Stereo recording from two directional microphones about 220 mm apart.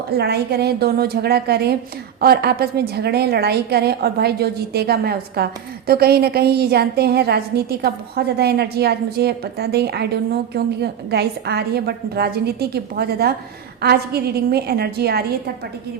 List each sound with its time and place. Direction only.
0.2 s a woman's voice: 45° right (ahead or behind)